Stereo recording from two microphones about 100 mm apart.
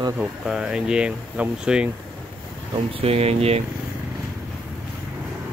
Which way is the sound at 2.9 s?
85° right.